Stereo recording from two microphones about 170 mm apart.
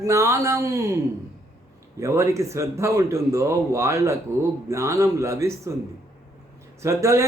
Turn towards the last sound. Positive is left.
turn(degrees=-20)  # may be behind; listen again after turning